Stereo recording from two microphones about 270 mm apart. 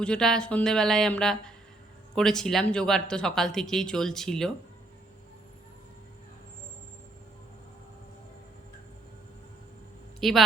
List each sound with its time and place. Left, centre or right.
0.0 s speech: centre
10.2 s a woman's voice: centre